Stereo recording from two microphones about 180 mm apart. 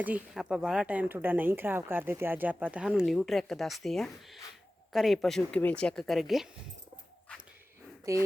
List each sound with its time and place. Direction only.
0.0 s speech: 5° right (ahead or behind)
8.1 s speech: 15° right (ahead or behind)